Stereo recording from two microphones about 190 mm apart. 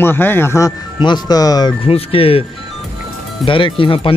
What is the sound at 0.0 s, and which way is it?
Speech, 10° left (ahead or behind).